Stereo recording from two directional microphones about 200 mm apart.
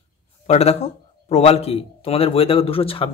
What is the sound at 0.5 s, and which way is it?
A man's voice, 35° left (ahead or behind).